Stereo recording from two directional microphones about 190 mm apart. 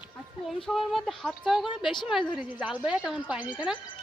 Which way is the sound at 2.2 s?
25° left (ahead or behind).